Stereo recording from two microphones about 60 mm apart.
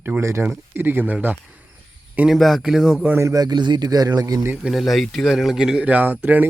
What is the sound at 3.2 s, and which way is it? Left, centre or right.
A man's voice, right.